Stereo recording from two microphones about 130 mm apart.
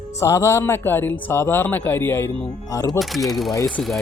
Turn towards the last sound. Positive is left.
turn(degrees=5)  # may be behind; listen again after turning